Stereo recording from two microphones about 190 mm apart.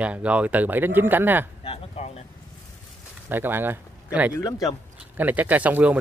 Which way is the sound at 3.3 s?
10° right (ahead or behind).